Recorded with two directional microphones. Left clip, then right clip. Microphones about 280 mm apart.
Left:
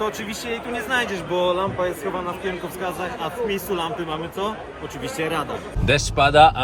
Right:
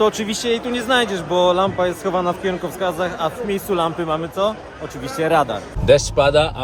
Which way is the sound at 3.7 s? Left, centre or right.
Right.